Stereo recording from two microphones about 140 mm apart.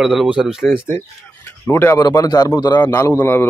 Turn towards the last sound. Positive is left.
turn(degrees=15)  # may be behind; listen again after turning